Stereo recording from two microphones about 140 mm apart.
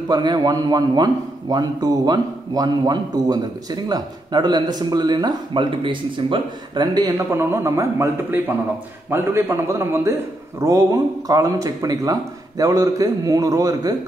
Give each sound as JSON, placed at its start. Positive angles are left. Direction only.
{"t": 0.1, "sound": "a man's voice", "side_deg": -30}